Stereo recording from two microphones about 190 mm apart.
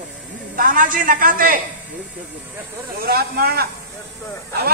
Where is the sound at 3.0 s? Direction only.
55° right (ahead or behind).